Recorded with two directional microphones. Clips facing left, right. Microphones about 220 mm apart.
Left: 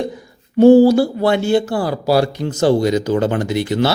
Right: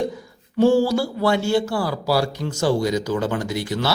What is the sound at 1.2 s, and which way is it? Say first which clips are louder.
Speech: left 4 dB; 20° left (ahead or behind).